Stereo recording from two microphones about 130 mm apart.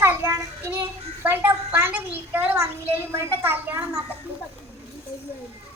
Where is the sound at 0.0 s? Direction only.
20° right (ahead or behind).